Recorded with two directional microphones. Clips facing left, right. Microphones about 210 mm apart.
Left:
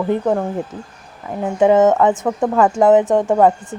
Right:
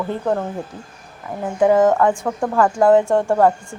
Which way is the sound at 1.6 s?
20° left (ahead or behind).